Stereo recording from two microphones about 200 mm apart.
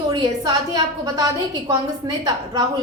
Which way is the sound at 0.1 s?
20° right (ahead or behind).